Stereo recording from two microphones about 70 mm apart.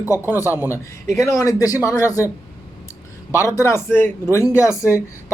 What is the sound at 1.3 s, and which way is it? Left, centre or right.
Speech, left.